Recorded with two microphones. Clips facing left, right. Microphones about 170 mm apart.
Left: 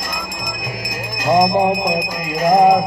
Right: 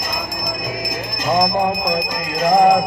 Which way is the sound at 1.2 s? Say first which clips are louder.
Left 3 dB; 10° left (ahead or behind).